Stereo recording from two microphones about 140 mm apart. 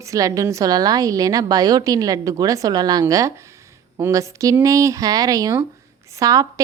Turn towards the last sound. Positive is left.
turn(degrees=-25)  # may be behind; listen again after turning